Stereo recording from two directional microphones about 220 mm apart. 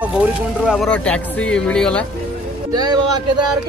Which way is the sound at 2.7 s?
20° right (ahead or behind).